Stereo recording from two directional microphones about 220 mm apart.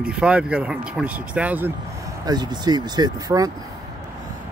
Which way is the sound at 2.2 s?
20° right (ahead or behind).